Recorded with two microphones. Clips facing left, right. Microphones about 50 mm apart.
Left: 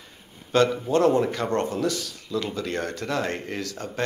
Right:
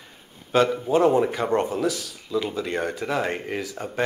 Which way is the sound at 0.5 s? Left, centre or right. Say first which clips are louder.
Right 1 dB; centre.